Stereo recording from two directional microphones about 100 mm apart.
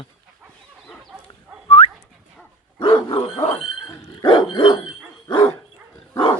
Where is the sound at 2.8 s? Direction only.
60° left (ahead or behind).